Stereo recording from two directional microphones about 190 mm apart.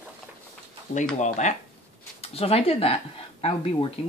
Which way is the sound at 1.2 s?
40° left (ahead or behind).